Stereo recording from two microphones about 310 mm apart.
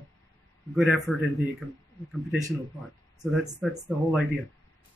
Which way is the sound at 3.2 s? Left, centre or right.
Centre.